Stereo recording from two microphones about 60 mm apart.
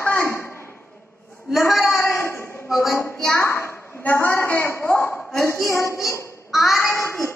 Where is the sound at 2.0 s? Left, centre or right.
Left.